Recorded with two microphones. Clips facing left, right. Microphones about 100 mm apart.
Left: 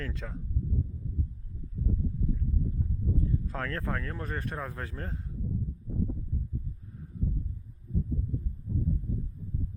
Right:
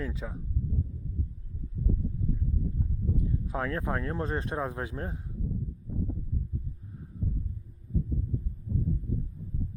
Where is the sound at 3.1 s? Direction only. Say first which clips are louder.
Right 2 dB; 15° right (ahead or behind).